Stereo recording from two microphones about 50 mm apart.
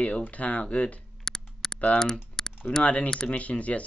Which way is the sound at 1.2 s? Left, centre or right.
Centre.